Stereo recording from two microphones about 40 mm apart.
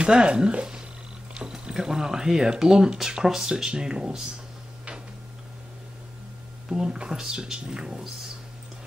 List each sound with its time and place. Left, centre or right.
0.0 s speech: right
1.3 s speech: centre
6.7 s speech: centre